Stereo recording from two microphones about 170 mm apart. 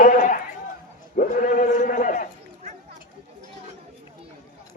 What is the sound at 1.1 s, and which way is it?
Sheep, 50° left (ahead or behind).